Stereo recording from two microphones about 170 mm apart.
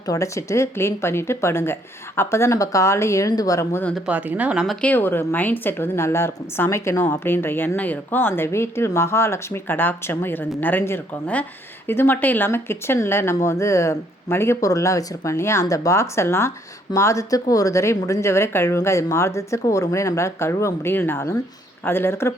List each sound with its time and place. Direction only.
0.1 s a woman's voice: 20° left (ahead or behind)
3.9 s a woman's voice: 5° right (ahead or behind); by 22.3 s 15° left (ahead or behind)